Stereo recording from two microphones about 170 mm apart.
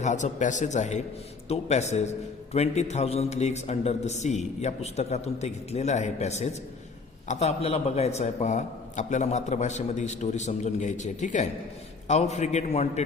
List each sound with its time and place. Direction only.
0.0 s a man's voice: 45° left (ahead or behind)